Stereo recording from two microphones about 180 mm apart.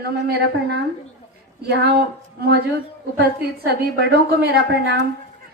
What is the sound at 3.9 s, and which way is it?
Speech, 60° right (ahead or behind).